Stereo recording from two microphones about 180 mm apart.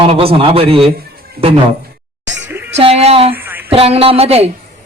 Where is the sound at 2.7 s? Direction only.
35° right (ahead or behind).